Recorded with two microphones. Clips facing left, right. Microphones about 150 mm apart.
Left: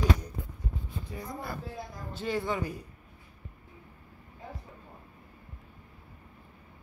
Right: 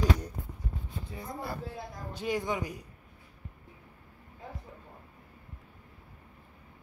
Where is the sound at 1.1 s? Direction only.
30° right (ahead or behind).